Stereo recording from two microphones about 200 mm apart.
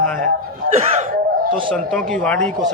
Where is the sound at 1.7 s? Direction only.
5° left (ahead or behind).